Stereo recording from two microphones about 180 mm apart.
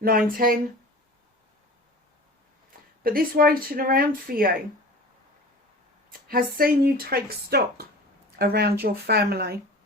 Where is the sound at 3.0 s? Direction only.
55° right (ahead or behind).